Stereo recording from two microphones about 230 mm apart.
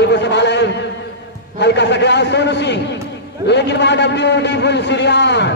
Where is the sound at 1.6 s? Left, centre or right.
Left.